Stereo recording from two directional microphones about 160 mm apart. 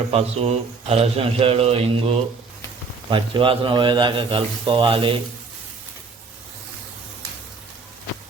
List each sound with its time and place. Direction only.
0.1 s a man's voice: 40° right (ahead or behind)